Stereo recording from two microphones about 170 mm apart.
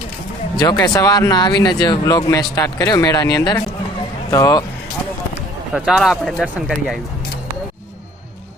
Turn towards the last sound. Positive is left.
turn(degrees=0)  # may be behind; listen again after turning